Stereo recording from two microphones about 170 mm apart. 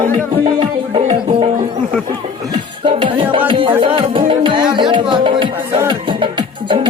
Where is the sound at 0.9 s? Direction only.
40° right (ahead or behind).